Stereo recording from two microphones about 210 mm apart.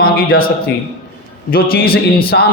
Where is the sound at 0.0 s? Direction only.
45° left (ahead or behind).